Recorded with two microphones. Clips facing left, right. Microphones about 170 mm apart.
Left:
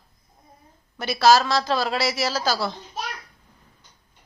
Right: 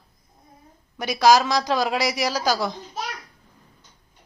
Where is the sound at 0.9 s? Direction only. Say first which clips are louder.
Even; 15° right (ahead or behind).